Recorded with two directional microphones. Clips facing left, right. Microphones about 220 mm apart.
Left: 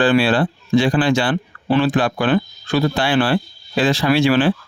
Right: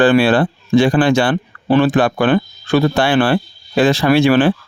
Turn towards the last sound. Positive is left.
turn(degrees=-50)  # may be behind; listen again after turning